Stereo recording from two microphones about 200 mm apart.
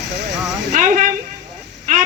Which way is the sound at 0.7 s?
40° right (ahead or behind).